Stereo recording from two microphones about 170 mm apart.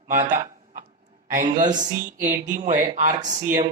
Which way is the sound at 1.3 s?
50° right (ahead or behind).